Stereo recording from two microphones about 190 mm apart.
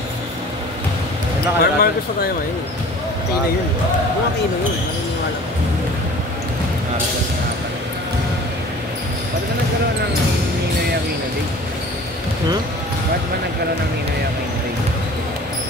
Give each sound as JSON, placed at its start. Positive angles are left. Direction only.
{"t": 1.6, "sound": "speech", "side_deg": 55}